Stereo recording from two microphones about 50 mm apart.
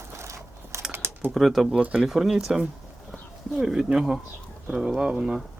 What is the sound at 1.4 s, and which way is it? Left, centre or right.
Speech, centre.